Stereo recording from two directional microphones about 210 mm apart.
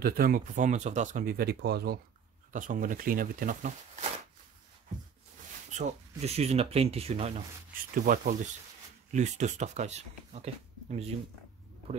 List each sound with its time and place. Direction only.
0.0 s speech: 45° right (ahead or behind)
2.5 s speech: 40° right (ahead or behind)
5.8 s speech: 30° right (ahead or behind)
7.9 s speech: 40° right (ahead or behind)